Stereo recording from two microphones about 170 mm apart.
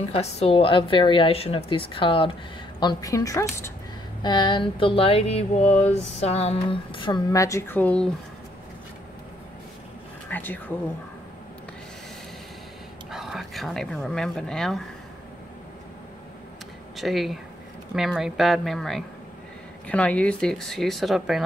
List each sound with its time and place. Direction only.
0.1 s a woman's voice: 35° left (ahead or behind); by 8.1 s 10° left (ahead or behind)
10.3 s a sound: 10° left (ahead or behind)
13.1 s speech: centre (ahead or behind)
16.9 s speech: centre (ahead or behind)